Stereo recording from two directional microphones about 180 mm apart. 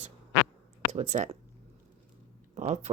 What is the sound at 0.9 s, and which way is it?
Speech, 40° right (ahead or behind).